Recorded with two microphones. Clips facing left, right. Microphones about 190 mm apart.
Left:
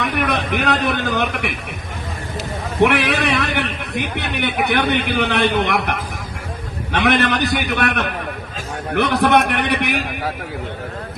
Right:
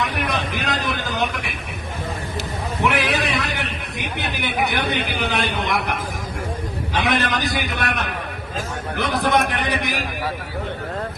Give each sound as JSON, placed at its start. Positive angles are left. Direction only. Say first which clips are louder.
{"t": 0.3, "sound": "a man's voice", "louder": "left 5 dB", "side_deg": 60}
{"t": 2.8, "sound": "a man's voice", "louder": "left 5 dB", "side_deg": 65}